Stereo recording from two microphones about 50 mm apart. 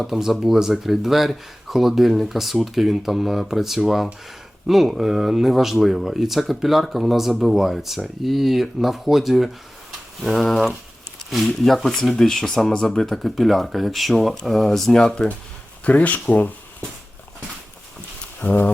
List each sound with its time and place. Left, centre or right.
0.0 s speech: centre
15.8 s speech: left
18.4 s speech: left